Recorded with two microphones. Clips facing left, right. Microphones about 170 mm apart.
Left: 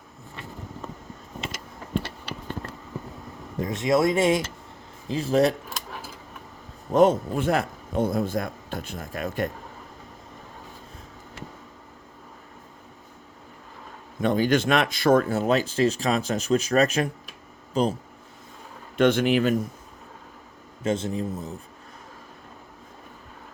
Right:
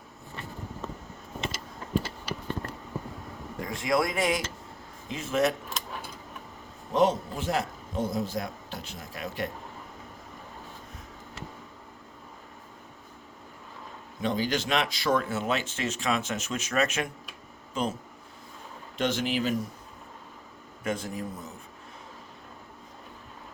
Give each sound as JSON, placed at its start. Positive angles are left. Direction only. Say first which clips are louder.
{"t": 3.6, "sound": "speech", "louder": "left 5 dB", "side_deg": 20}
{"t": 6.9, "sound": "a man's voice", "louder": "left 6 dB", "side_deg": 50}
{"t": 14.2, "sound": "speech", "louder": "left 7 dB", "side_deg": 55}
{"t": 18.9, "sound": "speech", "louder": "left 8 dB", "side_deg": 60}
{"t": 20.8, "sound": "speech", "louder": "left 6 dB", "side_deg": 25}